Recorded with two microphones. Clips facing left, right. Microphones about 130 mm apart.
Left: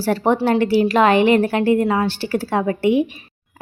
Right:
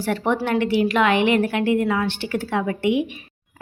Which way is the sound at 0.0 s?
35° left (ahead or behind).